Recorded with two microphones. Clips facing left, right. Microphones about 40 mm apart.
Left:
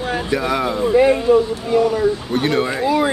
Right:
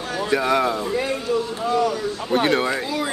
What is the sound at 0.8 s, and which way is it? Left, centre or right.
Speech, left.